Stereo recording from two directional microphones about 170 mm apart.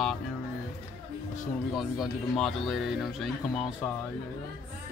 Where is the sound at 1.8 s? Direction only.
Centre (ahead or behind).